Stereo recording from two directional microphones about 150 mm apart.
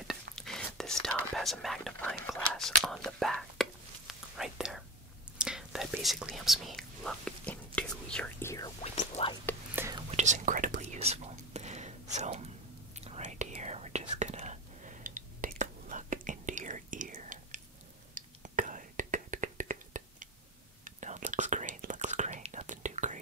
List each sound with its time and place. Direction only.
0.0 s whispering: centre (ahead or behind)
2.5 s speech: 5° left (ahead or behind)
4.1 s whispering: 5° right (ahead or behind)
5.4 s speech: 5° right (ahead or behind)
8.5 s speech: 25° left (ahead or behind)
8.8 s speech: 50° left (ahead or behind)
9.5 s whispering: 10° left (ahead or behind)
10.1 s speech: 55° right (ahead or behind)
10.8 s whispering: 45° right (ahead or behind)